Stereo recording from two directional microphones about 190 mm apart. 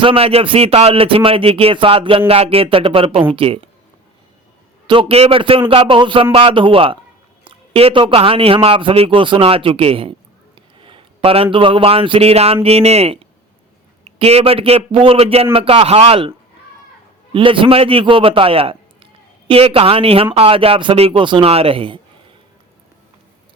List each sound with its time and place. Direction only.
0.0 s speech: 30° right (ahead or behind)
4.9 s speech: 30° right (ahead or behind)
10.8 s a sound: 30° right (ahead or behind)
11.5 s a man's voice: 30° right (ahead or behind)
17.3 s speech: 25° right (ahead or behind)